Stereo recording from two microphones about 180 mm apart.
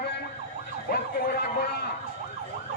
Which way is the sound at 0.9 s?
55° left (ahead or behind).